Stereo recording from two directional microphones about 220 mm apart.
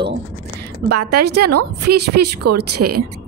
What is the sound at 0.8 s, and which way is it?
Speech, 90° right.